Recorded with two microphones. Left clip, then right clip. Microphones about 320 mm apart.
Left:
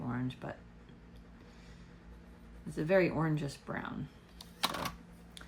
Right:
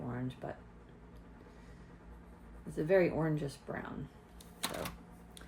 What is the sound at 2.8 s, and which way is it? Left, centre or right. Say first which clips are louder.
Speech: even; left.